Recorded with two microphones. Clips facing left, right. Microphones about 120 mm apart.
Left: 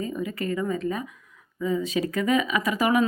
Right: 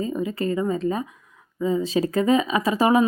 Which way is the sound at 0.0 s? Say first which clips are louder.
Right 4 dB; 25° right (ahead or behind).